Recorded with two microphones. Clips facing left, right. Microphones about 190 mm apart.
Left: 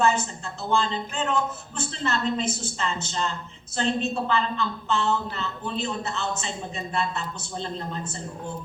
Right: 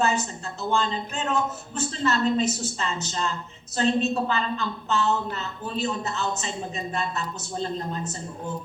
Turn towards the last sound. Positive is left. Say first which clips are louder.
# right 3 dB
turn(degrees=-40)  # may be behind; listen again after turning